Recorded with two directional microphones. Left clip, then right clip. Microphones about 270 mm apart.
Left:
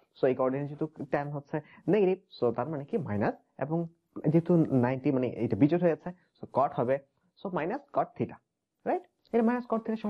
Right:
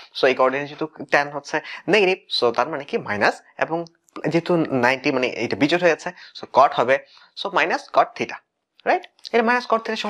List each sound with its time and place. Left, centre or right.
0.2 s speech: centre